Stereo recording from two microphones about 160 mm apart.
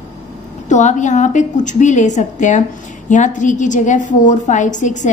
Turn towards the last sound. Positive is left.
turn(degrees=50)  # may be behind; listen again after turning